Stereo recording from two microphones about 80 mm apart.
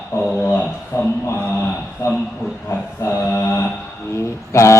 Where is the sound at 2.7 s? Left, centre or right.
Left.